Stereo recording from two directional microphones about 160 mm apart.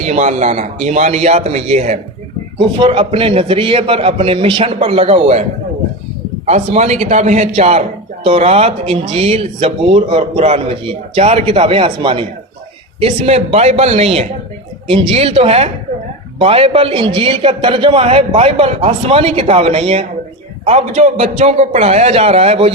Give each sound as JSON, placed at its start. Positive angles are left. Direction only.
{"t": 0.0, "sound": "a man's voice", "side_deg": -45}
{"t": 2.6, "sound": "a man's voice", "side_deg": -35}